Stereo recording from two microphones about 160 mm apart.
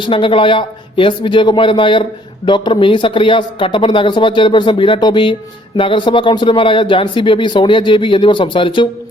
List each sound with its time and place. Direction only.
0.0 s speech: 30° left (ahead or behind)